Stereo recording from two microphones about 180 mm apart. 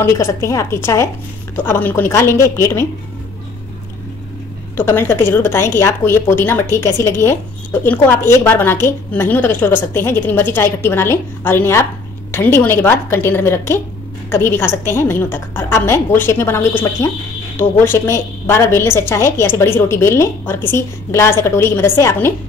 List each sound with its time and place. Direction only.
0.0 s a woman's voice: 15° left (ahead or behind)
4.7 s a woman's voice: 15° left (ahead or behind)